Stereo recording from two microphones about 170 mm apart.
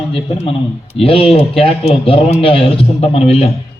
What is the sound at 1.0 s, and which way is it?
Speech, 35° left (ahead or behind).